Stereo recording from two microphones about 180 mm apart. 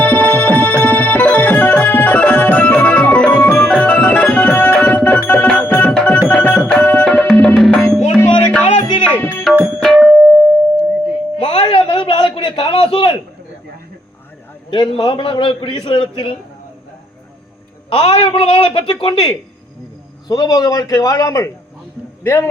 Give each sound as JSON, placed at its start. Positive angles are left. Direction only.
{"t": 0.0, "sound": "tabla", "side_deg": 10}
{"t": 5.3, "sound": "music", "side_deg": 5}
{"t": 6.2, "sound": "tabla", "side_deg": 5}
{"t": 8.1, "sound": "music", "side_deg": 5}
{"t": 11.4, "sound": "a sound", "side_deg": 30}
{"t": 14.7, "sound": "a man's voice", "side_deg": 30}
{"t": 17.8, "sound": "a man's voice", "side_deg": 30}